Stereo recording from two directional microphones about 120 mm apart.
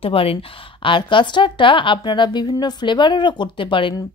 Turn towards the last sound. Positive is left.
turn(degrees=45)  # may be behind; listen again after turning